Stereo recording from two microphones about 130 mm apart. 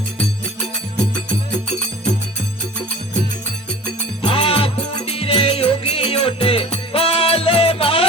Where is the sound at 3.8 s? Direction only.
40° left (ahead or behind).